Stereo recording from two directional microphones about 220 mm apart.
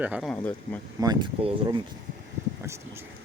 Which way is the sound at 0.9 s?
20° right (ahead or behind).